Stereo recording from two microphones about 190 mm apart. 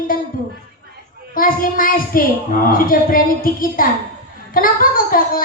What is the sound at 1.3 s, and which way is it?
Speech, 45° left (ahead or behind).